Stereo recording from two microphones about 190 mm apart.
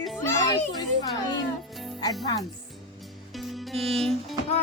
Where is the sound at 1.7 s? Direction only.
Centre (ahead or behind).